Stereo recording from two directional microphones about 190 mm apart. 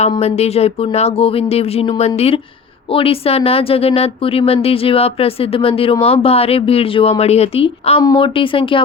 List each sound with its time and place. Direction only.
0.1 s speech: 35° left (ahead or behind)